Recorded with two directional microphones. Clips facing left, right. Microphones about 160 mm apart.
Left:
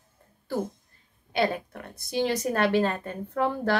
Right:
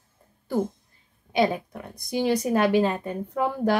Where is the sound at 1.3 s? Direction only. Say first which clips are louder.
Right 3 dB; 15° right (ahead or behind).